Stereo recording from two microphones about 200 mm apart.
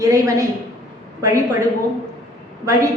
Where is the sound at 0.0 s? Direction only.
15° right (ahead or behind).